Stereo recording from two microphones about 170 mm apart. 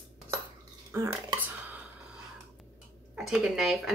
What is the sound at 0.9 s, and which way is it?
Speech, 15° right (ahead or behind).